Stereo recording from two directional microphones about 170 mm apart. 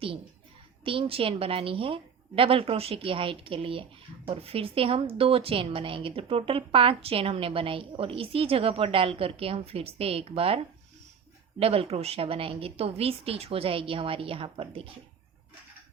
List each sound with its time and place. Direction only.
0.9 s a woman's voice: 35° right (ahead or behind)
11.6 s a woman's voice: 35° right (ahead or behind)